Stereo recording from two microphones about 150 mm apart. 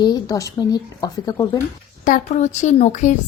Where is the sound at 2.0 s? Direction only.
55° left (ahead or behind).